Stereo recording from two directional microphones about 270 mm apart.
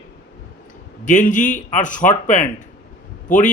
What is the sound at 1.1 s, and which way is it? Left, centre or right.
A man's voice, left.